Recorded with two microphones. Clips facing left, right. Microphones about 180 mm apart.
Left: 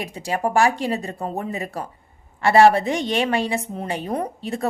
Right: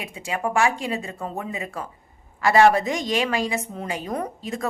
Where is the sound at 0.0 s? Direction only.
35° left (ahead or behind).